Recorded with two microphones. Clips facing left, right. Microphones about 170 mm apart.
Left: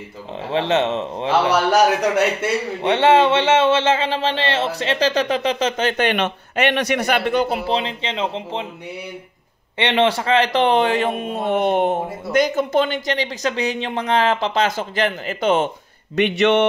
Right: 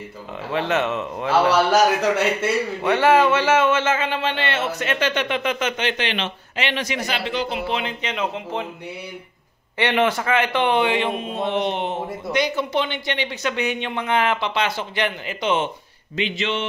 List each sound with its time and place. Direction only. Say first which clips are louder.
0.5 s speech: left 3 dB; 30° left (ahead or behind)
2.8 s a man's voice: left 2 dB; 25° left (ahead or behind); by 7.6 s 50° left (ahead or behind)
7.6 s speech: left 3 dB; 30° left (ahead or behind)
9.8 s a man's voice: left 2 dB; 25° left (ahead or behind); by 15.7 s 40° left (ahead or behind)
16.2 s speech: left 9 dB; 65° left (ahead or behind)